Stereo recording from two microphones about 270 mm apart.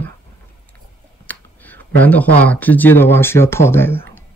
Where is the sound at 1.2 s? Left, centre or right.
Centre.